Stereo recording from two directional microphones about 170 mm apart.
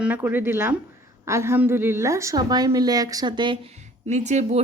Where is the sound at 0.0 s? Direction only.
10° right (ahead or behind).